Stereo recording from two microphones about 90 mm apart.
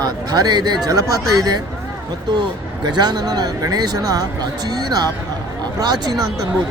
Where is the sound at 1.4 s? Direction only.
50° right (ahead or behind).